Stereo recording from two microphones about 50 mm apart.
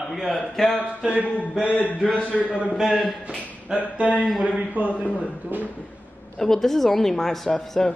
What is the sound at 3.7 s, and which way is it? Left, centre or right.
Speech, centre.